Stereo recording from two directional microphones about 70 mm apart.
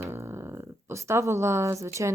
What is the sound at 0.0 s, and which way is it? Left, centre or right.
Speech, right.